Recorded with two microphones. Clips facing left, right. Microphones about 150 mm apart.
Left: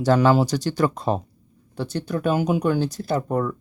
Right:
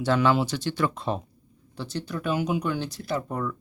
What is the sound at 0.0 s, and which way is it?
Speech, 40° left (ahead or behind).